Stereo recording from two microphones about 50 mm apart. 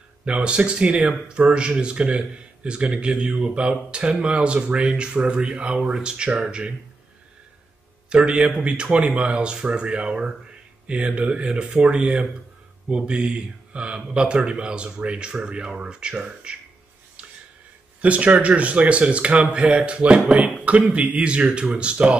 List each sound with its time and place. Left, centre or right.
0.2 s speech: right
8.1 s speech: centre
17.2 s a sound: centre
18.0 s speech: right